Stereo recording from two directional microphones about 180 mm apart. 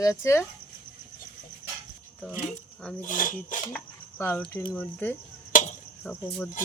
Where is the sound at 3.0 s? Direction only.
50° left (ahead or behind).